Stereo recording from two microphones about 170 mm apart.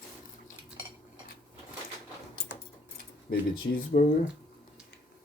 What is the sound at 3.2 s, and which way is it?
Speech, 60° left (ahead or behind).